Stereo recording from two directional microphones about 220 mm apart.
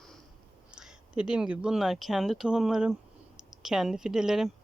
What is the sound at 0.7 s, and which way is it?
Speech, 5° right (ahead or behind).